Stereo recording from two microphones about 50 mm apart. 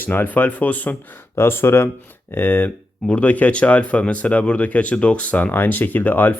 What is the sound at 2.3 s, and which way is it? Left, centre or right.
Speech, left.